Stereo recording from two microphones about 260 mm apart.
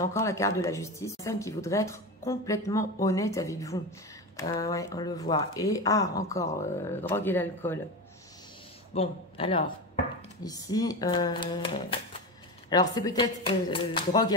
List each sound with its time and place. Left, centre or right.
0.0 s speech: centre
8.9 s a man's voice: left